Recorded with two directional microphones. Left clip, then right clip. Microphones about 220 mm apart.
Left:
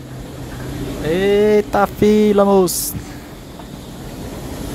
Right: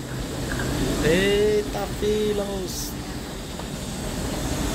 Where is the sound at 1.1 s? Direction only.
30° left (ahead or behind).